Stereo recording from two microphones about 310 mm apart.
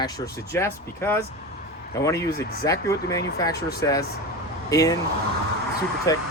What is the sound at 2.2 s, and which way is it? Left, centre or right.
Speech, left.